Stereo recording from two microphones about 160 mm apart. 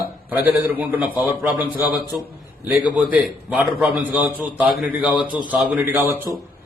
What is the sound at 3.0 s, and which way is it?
A man's voice, 10° right (ahead or behind).